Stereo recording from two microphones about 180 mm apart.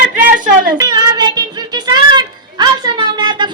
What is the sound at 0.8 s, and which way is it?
Child singing, 20° right (ahead or behind).